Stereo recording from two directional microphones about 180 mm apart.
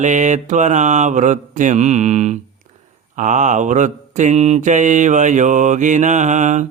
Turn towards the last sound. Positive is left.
turn(degrees=-40)  # may be behind; listen again after turning